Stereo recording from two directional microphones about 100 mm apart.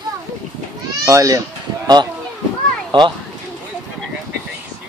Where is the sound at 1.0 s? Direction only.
35° right (ahead or behind).